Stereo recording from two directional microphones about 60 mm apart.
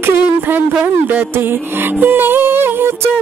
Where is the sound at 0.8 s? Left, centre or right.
Right.